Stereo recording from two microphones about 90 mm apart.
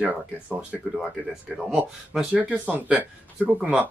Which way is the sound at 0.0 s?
15° right (ahead or behind).